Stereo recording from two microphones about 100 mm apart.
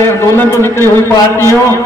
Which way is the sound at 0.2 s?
25° left (ahead or behind).